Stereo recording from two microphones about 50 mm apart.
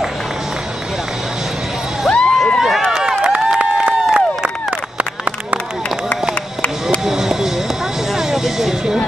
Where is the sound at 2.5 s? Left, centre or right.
Centre.